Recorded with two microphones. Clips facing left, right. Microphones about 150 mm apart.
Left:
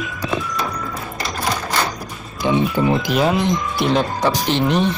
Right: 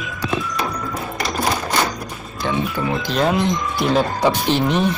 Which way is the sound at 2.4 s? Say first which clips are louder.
Left 5 dB; 15° left (ahead or behind).